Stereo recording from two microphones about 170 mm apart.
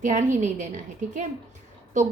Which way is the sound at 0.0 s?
50° right (ahead or behind).